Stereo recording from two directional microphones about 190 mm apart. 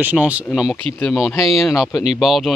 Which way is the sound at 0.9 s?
5° left (ahead or behind).